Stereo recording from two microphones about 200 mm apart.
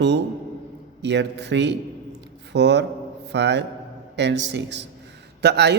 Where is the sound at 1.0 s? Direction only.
60° right (ahead or behind).